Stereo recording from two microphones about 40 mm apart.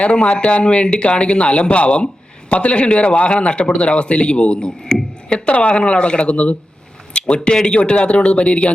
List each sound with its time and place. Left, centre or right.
0.0 s speech: left
7.1 s a sound: left
7.4 s speech: left